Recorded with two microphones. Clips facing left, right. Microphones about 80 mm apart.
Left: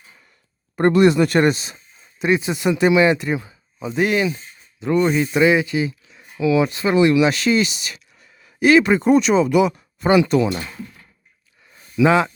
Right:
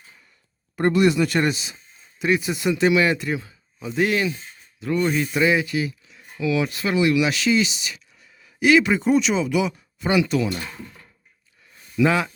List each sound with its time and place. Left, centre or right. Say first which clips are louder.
0.8 s speech: left 4 dB; left
2.2 s speech: left 3 dB; left
10.1 s speech: left 5 dB; left
11.9 s speech: left 4 dB; left